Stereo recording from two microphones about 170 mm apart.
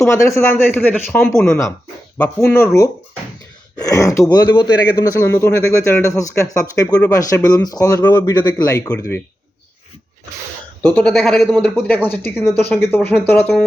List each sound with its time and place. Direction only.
0.0 s speech: 15° left (ahead or behind)
5.2 s speech: 15° left (ahead or behind)
8.0 s speech: 10° left (ahead or behind)
8.4 s speech: 25° left (ahead or behind)
10.8 s speech: 5° left (ahead or behind)